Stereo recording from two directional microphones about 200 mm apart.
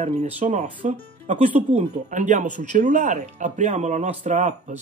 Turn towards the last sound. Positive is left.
turn(degrees=-40)  # may be behind; listen again after turning